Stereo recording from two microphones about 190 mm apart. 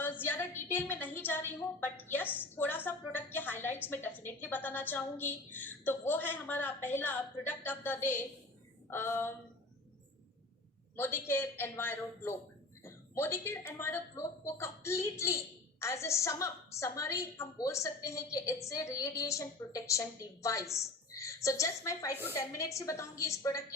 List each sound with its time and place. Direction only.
0.0 s a woman's voice: 10° left (ahead or behind)
10.9 s speech: 10° left (ahead or behind)